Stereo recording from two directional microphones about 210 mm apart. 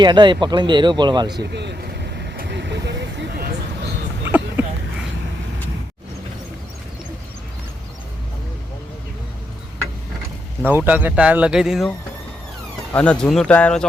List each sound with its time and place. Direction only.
0.0 s speech: 20° right (ahead or behind)
1.3 s vehicle: 50° right (ahead or behind)
4.2 s a sound: 10° right (ahead or behind)
10.6 s speech: 10° right (ahead or behind)